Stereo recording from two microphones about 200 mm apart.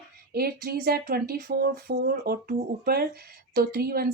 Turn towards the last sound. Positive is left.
turn(degrees=-50)  # may be behind; listen again after turning